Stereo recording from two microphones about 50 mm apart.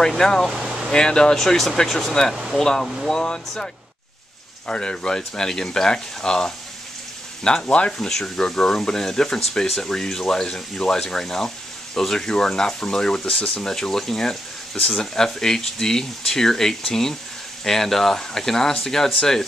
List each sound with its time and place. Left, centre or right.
0.2 s speech: centre
0.5 s vehicle: centre
0.9 s speech: centre
7.6 s speech: left
8.1 s speech: centre